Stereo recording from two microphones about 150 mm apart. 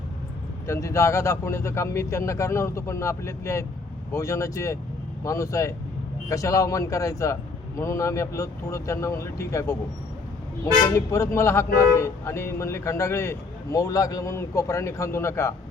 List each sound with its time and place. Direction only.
0.7 s speech: 20° left (ahead or behind)